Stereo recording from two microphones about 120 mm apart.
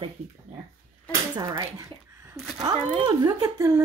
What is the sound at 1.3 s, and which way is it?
Speech, 35° right (ahead or behind).